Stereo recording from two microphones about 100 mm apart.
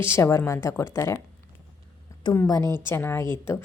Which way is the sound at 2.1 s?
30° left (ahead or behind).